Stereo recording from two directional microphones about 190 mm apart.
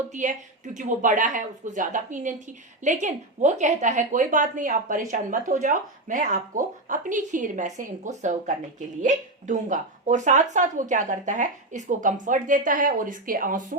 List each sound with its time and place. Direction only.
0.1 s speech: 40° right (ahead or behind)